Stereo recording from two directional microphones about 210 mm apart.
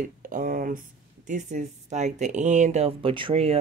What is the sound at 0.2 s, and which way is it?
Speech, 40° right (ahead or behind).